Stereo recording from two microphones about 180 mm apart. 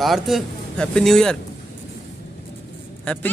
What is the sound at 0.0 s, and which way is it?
Speech, centre (ahead or behind).